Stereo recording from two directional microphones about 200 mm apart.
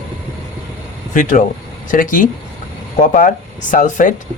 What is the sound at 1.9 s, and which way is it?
Speech, 45° left (ahead or behind).